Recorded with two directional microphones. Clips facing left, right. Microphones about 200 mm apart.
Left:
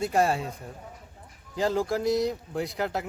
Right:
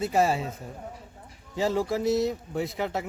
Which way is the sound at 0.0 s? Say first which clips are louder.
Even; 5° right (ahead or behind).